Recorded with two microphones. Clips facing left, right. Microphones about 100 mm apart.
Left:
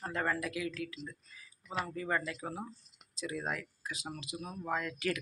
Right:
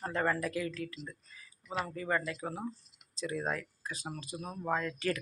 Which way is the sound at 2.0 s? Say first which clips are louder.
Right 2 dB; 10° left (ahead or behind).